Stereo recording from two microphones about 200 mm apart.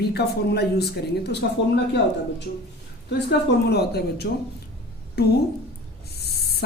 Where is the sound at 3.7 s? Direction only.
55° left (ahead or behind).